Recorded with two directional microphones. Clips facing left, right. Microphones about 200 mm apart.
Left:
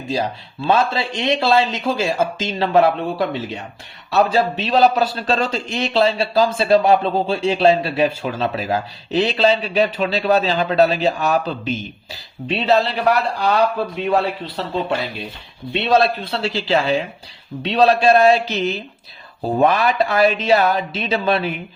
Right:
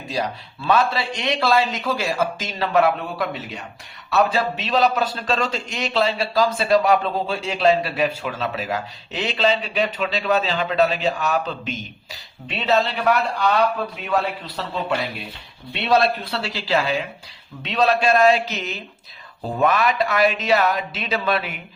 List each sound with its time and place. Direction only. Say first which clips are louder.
0.1 s a man's voice: left 3 dB; 30° left (ahead or behind)